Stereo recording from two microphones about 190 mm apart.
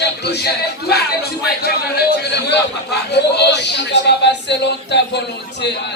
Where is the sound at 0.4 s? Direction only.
55° left (ahead or behind).